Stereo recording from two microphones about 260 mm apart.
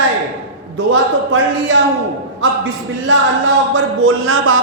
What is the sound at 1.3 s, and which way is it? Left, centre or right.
Speech, right.